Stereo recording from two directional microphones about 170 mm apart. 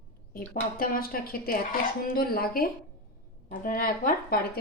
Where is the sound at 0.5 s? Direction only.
60° left (ahead or behind).